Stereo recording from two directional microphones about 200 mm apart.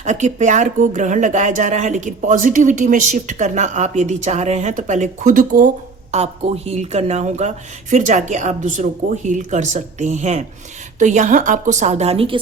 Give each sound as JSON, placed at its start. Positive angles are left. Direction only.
{"t": 0.0, "sound": "speech", "side_deg": -35}